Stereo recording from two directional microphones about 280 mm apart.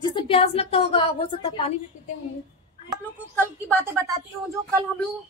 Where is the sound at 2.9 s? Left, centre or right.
Centre.